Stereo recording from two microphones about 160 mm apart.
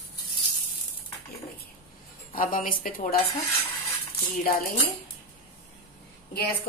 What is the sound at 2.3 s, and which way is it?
Speech, 60° left (ahead or behind).